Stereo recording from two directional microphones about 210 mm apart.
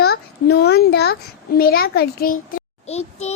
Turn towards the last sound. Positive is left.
turn(degrees=30)  # may be behind; listen again after turning